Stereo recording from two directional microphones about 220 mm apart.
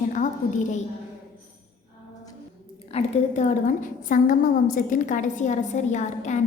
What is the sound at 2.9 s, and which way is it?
A woman's voice, 35° left (ahead or behind).